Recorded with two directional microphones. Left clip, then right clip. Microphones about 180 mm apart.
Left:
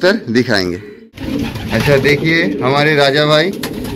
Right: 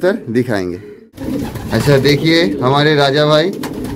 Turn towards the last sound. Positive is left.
turn(degrees=-10)  # may be behind; listen again after turning